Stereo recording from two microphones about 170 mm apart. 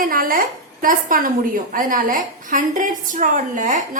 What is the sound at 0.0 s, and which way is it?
A woman's voice, 55° right (ahead or behind).